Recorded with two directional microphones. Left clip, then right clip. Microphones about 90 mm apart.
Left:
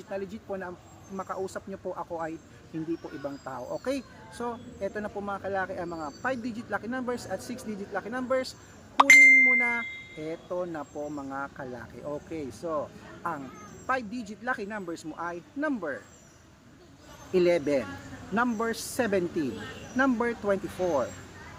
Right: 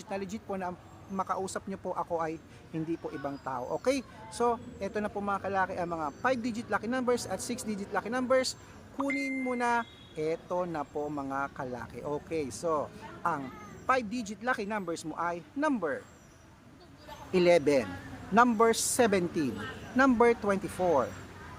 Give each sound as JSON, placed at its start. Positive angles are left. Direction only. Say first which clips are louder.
{"t": 0.1, "sound": "speech", "louder": "left 1 dB", "side_deg": -25}
{"t": 13.8, "sound": "speech", "louder": "right 2 dB", "side_deg": -25}
{"t": 17.3, "sound": "speech", "louder": "even", "side_deg": -25}